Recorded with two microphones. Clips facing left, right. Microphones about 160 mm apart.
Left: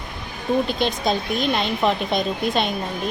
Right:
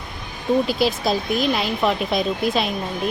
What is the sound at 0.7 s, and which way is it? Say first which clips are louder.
Speech: right 2 dB; 5° right (ahead or behind).